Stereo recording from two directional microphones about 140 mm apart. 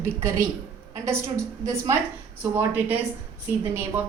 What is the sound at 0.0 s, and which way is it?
Speech, 20° right (ahead or behind).